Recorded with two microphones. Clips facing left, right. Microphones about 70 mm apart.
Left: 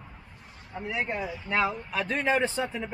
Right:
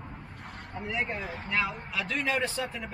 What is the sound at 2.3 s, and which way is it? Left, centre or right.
Speech, left.